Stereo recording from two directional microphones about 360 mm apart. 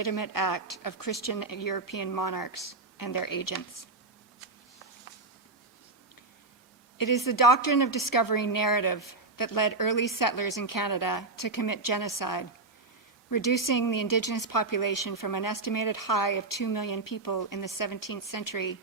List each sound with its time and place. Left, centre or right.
0.0 s speech: left
7.0 s speech: left